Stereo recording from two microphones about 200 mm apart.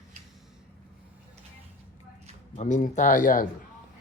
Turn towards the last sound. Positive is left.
turn(degrees=45)  # may be behind; listen again after turning